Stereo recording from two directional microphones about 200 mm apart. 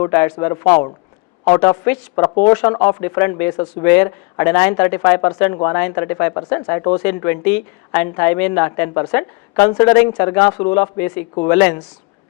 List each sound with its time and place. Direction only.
0.0 s a woman's voice: 10° left (ahead or behind)